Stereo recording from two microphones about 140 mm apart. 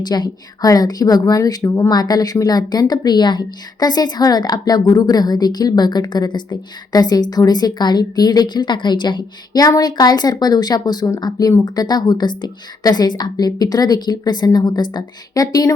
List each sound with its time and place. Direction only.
0.1 s a woman's voice: 25° left (ahead or behind)